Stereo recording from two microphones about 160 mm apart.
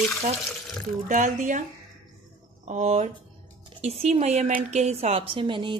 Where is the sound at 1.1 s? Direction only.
55° right (ahead or behind).